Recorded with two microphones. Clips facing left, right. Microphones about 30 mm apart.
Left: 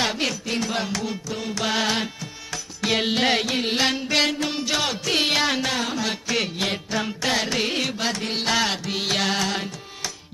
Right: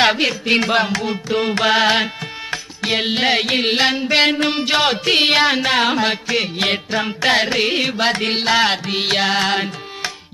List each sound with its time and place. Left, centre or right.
0.5 s music: right
3.4 s music: right
3.8 s music: right
4.3 s music: right
5.8 s music: right
6.2 s music: right